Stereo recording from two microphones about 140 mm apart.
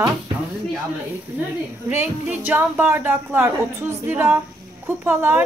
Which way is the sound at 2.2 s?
10° right (ahead or behind).